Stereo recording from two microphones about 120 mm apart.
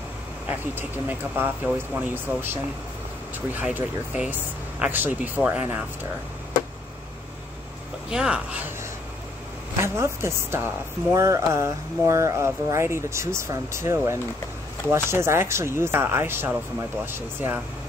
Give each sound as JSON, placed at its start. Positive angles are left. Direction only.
{"t": 0.5, "sound": "speech", "side_deg": -15}
{"t": 8.1, "sound": "speech", "side_deg": -5}
{"t": 9.8, "sound": "speech", "side_deg": -20}